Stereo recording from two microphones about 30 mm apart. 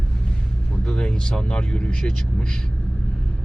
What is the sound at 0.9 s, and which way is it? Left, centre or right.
Speech, left.